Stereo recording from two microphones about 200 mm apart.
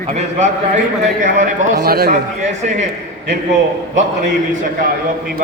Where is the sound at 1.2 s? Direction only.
40° right (ahead or behind).